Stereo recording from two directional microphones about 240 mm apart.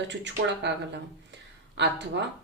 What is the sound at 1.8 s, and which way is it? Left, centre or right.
Speech, right.